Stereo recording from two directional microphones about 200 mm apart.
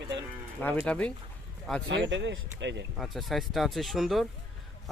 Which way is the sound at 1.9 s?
65° right (ahead or behind).